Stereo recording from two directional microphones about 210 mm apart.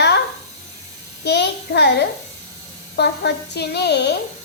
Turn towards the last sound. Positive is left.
turn(degrees=55)  # may be behind; listen again after turning